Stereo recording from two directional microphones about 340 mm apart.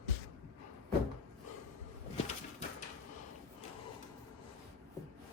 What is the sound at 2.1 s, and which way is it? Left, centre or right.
Bird, centre.